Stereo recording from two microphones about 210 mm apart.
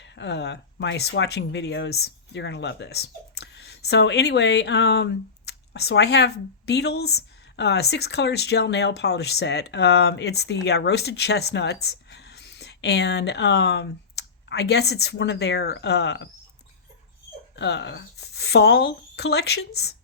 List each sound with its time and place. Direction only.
0.0 s speech: 55° left (ahead or behind)
17.5 s speech: 55° left (ahead or behind)